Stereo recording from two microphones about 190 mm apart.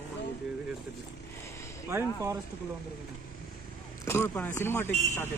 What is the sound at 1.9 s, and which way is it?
Speech, 15° right (ahead or behind).